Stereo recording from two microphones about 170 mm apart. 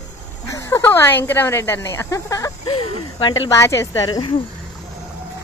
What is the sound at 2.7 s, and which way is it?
Speech, 35° left (ahead or behind).